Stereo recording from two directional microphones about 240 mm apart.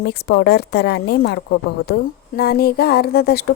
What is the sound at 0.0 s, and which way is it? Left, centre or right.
A woman's voice, left.